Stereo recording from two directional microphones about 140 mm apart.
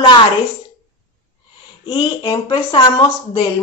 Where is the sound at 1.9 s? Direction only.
30° left (ahead or behind).